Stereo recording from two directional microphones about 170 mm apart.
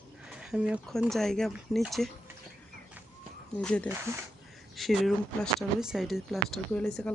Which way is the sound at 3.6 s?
5° left (ahead or behind).